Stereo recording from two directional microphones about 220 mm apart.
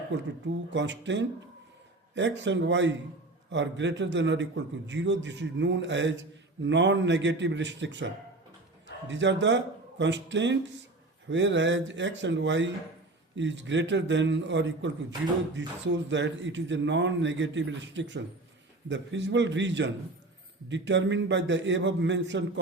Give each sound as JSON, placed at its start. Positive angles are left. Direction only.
{"t": 0.4, "sound": "a man's voice", "side_deg": -55}